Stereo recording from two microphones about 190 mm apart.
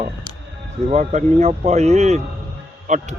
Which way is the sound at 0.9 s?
35° right (ahead or behind).